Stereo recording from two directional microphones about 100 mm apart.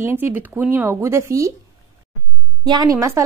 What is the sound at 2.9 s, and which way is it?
Speech, 30° right (ahead or behind).